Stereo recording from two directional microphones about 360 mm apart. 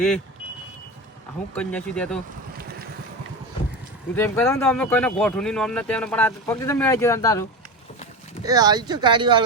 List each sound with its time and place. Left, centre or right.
1.5 s speech: centre
4.1 s speech: centre
8.4 s speech: centre